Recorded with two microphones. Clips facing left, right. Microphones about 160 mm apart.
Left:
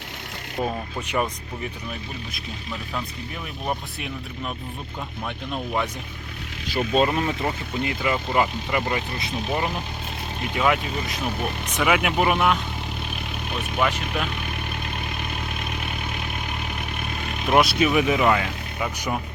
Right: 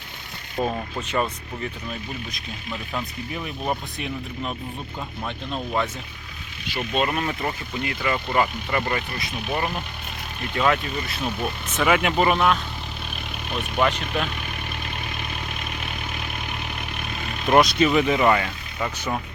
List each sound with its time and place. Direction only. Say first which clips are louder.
0.6 s speech: right 1 dB; centre (ahead or behind)
1.0 s speech: even; 15° left (ahead or behind)
2.9 s speech: right 3 dB; 5° right (ahead or behind)
6.7 s speech: left 4 dB; 35° left (ahead or behind)
7.1 s speech: left 2 dB; 20° left (ahead or behind)
10.5 s speech: even; 10° left (ahead or behind)
13.7 s speech: right 2 dB; centre (ahead or behind)
17.5 s speech: right 2 dB; 5° left (ahead or behind)